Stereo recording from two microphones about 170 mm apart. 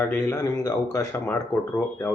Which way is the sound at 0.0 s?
15° left (ahead or behind).